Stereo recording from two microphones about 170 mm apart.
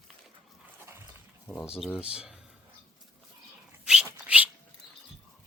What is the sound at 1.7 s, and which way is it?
Speech, 5° right (ahead or behind).